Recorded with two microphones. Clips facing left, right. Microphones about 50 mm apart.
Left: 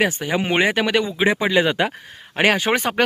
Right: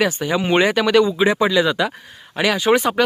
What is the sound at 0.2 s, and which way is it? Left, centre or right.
Speech, left.